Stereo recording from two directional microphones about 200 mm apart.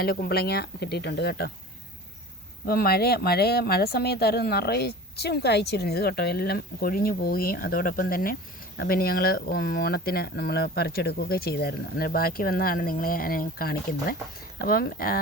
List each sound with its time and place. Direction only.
0.0 s speech: 50° left (ahead or behind)
2.6 s speech: 50° left (ahead or behind)